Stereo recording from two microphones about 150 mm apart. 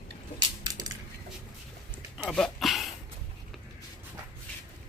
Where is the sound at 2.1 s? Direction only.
5° left (ahead or behind).